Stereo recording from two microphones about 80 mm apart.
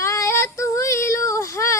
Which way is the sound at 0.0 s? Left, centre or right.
Left.